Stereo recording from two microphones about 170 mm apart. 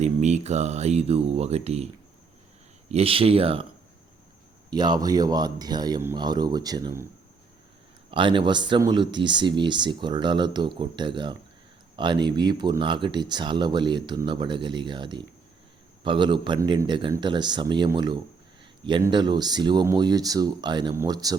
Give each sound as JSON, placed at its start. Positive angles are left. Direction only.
{"t": 0.0, "sound": "speech", "side_deg": -45}
{"t": 2.9, "sound": "speech", "side_deg": -35}
{"t": 4.7, "sound": "speech", "side_deg": -25}
{"t": 8.1, "sound": "speech", "side_deg": -30}